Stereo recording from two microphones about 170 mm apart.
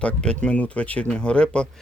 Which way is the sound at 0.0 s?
5° left (ahead or behind).